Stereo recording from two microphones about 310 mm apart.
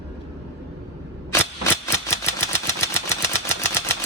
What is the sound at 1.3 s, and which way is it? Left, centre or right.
Cap gun, centre.